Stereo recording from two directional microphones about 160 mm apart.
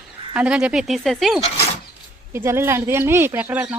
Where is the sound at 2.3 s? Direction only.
15° right (ahead or behind).